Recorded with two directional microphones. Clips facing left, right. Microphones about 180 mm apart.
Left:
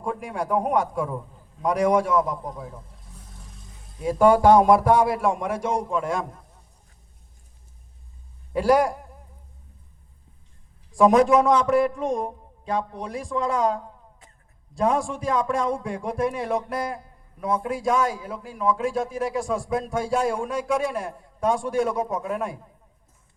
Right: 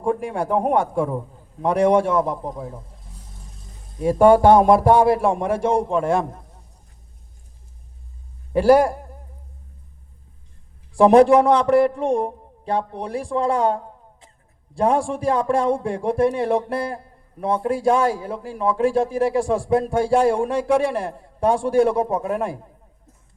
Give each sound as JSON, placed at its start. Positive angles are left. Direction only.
{"t": 0.0, "sound": "a man's voice", "side_deg": -30}
{"t": 3.9, "sound": "a man's voice", "side_deg": -30}
{"t": 8.6, "sound": "a man's voice", "side_deg": -30}
{"t": 10.9, "sound": "a man's voice", "side_deg": -30}